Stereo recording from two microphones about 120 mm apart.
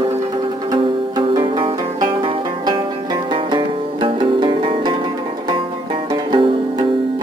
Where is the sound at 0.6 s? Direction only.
40° right (ahead or behind).